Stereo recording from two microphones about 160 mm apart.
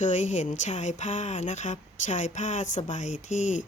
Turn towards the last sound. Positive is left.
turn(degrees=50)  # may be behind; listen again after turning